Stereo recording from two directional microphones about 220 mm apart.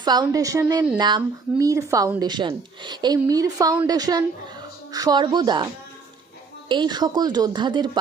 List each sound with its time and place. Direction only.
0.0 s speech: 20° right (ahead or behind)
6.7 s speech: 20° right (ahead or behind)